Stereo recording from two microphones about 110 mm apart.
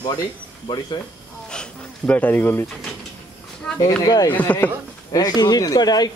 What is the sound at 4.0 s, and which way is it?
Speech, 35° left (ahead or behind).